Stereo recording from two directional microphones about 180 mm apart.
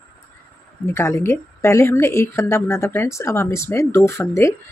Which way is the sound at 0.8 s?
15° left (ahead or behind).